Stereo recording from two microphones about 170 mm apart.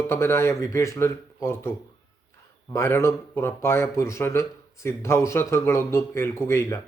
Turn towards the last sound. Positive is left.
turn(degrees=15)  # may be behind; listen again after turning